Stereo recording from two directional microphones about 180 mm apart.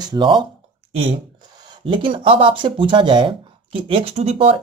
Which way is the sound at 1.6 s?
25° right (ahead or behind).